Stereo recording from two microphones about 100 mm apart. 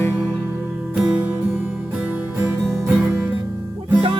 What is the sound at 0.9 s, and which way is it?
Music, 5° right (ahead or behind).